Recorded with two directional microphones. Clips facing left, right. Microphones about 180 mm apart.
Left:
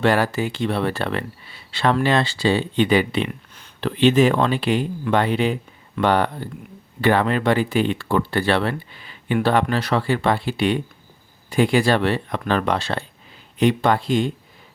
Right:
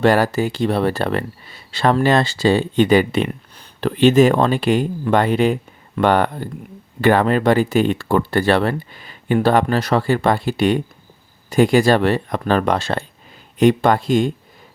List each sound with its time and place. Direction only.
0.0 s speech: 40° right (ahead or behind)